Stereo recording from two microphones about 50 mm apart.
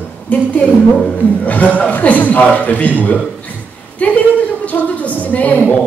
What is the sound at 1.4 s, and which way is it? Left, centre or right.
A man's voice, left.